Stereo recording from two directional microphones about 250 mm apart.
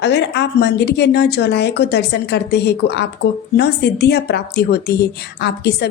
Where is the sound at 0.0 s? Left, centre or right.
Left.